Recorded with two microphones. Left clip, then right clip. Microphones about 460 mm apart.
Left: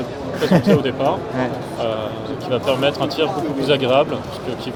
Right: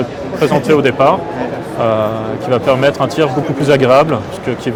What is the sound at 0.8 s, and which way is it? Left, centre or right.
Speech, right.